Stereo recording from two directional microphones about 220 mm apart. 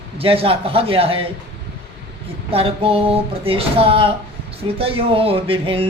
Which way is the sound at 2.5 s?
25° right (ahead or behind).